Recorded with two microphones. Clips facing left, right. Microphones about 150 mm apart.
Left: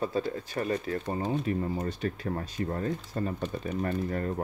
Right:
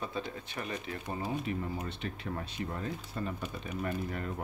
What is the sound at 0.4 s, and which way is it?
Speech, 40° left (ahead or behind).